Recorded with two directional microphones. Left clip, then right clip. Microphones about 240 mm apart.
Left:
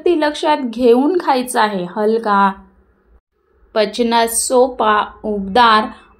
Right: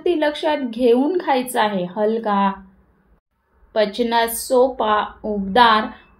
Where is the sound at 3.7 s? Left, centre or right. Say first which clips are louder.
Left 3 dB; left.